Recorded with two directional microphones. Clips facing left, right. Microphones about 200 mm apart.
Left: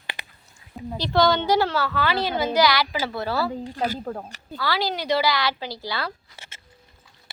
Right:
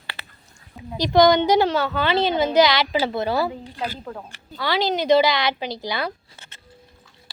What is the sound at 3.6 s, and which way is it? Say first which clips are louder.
Speech: left 3 dB; 45° left (ahead or behind).